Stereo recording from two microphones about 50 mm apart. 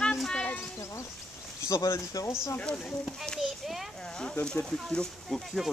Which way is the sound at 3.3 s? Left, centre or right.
Centre.